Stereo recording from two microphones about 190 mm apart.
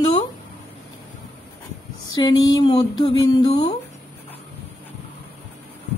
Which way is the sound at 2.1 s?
20° left (ahead or behind).